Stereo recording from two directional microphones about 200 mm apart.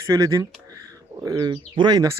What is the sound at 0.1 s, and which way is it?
A man's voice, 15° right (ahead or behind).